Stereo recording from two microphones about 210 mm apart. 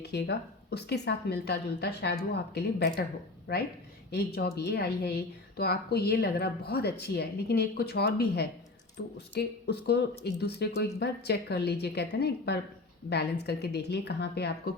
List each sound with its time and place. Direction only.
0.0 s a woman's voice: 50° left (ahead or behind)